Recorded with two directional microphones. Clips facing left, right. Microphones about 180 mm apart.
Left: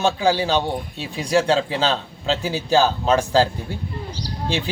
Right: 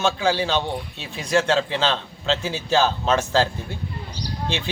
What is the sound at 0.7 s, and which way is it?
Speech, 45° left (ahead or behind).